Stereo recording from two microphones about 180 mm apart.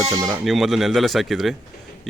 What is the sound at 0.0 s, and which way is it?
Speech, 20° right (ahead or behind).